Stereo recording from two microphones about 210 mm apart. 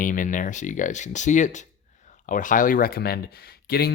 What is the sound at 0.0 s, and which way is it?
Speech, 40° left (ahead or behind).